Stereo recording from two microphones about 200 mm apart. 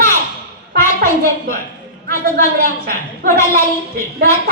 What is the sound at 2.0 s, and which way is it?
A woman's voice, 45° right (ahead or behind).